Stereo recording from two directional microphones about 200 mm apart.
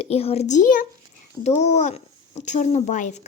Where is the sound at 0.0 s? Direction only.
30° left (ahead or behind).